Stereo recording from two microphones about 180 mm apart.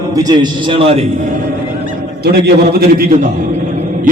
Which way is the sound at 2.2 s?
60° right (ahead or behind).